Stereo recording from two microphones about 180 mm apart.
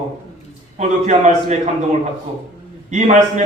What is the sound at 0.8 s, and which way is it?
Speech, 40° right (ahead or behind).